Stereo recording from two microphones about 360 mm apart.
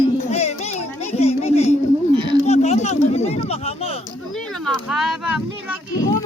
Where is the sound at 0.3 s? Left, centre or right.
Centre.